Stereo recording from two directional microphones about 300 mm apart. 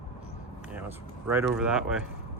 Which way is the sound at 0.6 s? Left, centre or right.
Centre.